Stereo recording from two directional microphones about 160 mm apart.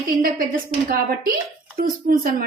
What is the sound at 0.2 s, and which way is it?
Speech, 65° right (ahead or behind).